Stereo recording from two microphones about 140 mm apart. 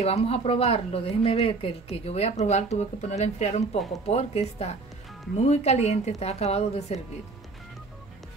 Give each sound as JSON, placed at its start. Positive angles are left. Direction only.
{"t": 0.0, "sound": "speech", "side_deg": 50}